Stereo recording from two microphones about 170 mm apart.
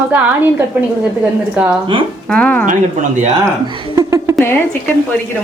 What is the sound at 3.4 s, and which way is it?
Speech, 30° right (ahead or behind).